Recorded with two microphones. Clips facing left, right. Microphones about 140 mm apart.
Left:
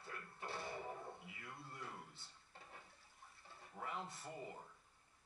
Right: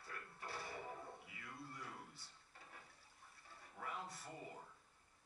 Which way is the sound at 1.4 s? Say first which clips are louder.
Even; 25° left (ahead or behind).